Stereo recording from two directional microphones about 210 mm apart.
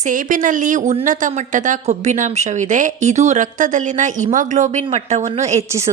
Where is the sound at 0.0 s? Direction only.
40° right (ahead or behind).